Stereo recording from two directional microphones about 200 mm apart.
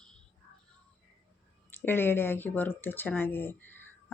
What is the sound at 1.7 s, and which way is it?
Speech, 10° left (ahead or behind).